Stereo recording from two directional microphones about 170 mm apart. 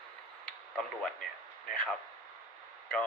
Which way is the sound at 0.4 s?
5° left (ahead or behind).